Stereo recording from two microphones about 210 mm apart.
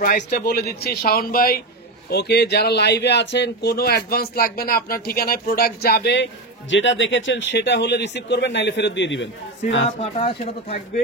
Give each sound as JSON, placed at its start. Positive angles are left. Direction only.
{"t": 0.0, "sound": "speech", "side_deg": 45}
{"t": 6.7, "sound": "a man's voice", "side_deg": 60}
{"t": 9.8, "sound": "speech", "side_deg": 30}